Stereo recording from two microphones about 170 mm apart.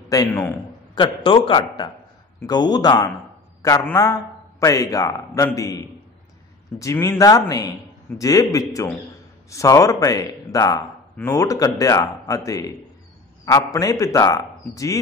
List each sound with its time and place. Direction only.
0.1 s a man's voice: 15° left (ahead or behind)
0.9 s a man's voice: 30° left (ahead or behind)